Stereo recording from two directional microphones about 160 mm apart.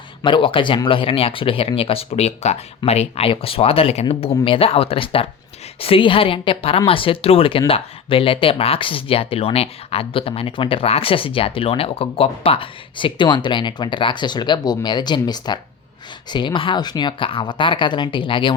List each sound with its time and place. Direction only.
0.2 s a woman's voice: 30° left (ahead or behind)